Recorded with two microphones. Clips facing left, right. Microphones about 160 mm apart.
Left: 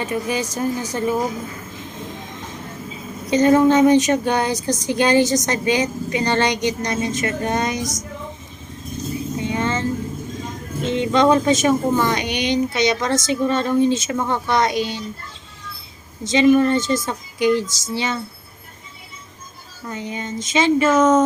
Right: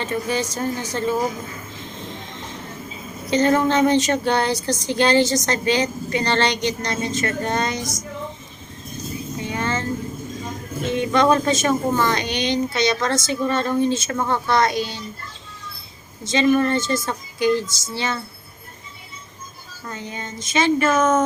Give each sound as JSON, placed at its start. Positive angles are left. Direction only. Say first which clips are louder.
{"t": 0.0, "sound": "a woman's voice", "louder": "left 1 dB", "side_deg": 15}
{"t": 3.2, "sound": "a woman's voice", "louder": "left 4 dB", "side_deg": 15}
{"t": 9.4, "sound": "music", "louder": "left 2 dB", "side_deg": 20}
{"t": 10.8, "sound": "a woman's voice", "louder": "left 2 dB", "side_deg": 20}
{"t": 16.2, "sound": "a woman's voice", "louder": "left 3 dB", "side_deg": 15}
{"t": 19.9, "sound": "a woman's voice", "louder": "left 5 dB", "side_deg": 15}